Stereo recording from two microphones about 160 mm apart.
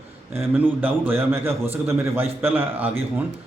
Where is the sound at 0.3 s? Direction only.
10° right (ahead or behind).